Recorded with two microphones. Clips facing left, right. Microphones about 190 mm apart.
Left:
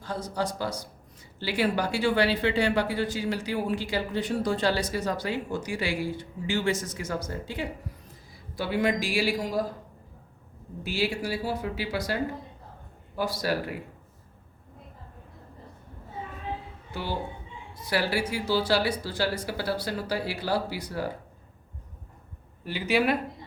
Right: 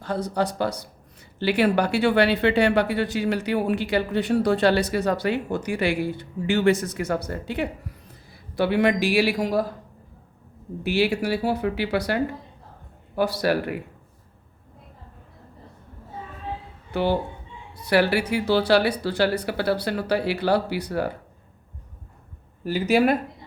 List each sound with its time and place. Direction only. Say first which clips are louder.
0.0 s a man's voice: right 6 dB; 65° right (ahead or behind)
10.8 s speech: right 7 dB; 65° right (ahead or behind)
16.9 s speech: right 9 dB; 65° right (ahead or behind)
22.6 s speech: right 6 dB; 45° right (ahead or behind)